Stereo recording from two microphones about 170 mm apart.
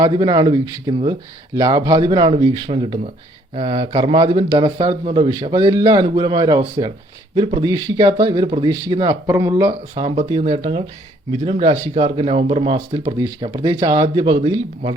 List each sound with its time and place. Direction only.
0.0 s speech: 25° right (ahead or behind)